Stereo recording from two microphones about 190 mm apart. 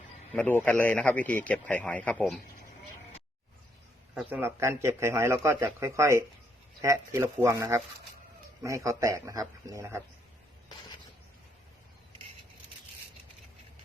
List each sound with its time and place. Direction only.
0.3 s a man's voice: 10° left (ahead or behind)
4.1 s speech: 10° right (ahead or behind)